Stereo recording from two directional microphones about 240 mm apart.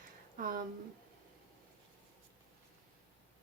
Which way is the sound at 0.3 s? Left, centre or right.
Right.